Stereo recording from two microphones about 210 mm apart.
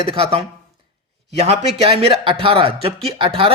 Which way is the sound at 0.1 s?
25° right (ahead or behind).